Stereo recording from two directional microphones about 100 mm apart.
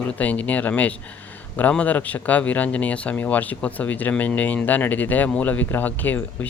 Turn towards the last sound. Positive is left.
turn(degrees=20)  # may be behind; listen again after turning